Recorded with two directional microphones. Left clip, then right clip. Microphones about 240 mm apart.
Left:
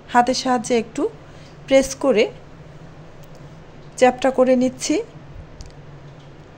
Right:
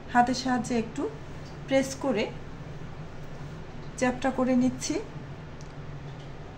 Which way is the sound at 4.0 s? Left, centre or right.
Left.